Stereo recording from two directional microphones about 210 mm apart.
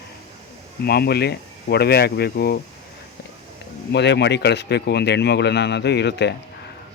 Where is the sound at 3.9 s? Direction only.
55° left (ahead or behind).